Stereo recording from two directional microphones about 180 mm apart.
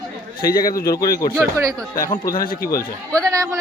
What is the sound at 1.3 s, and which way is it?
Speech, 15° right (ahead or behind).